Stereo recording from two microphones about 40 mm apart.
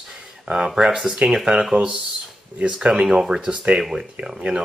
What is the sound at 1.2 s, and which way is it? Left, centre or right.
Speech, right.